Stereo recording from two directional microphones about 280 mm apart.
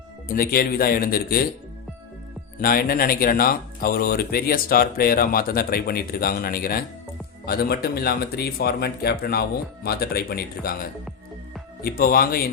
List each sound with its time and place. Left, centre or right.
0.3 s speech: left
2.6 s speech: left